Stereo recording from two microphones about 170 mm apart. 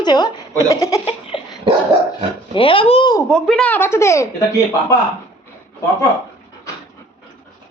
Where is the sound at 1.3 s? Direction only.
30° left (ahead or behind).